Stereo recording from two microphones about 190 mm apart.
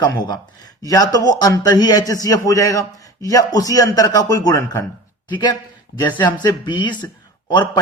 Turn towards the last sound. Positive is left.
turn(degrees=25)  # may be behind; listen again after turning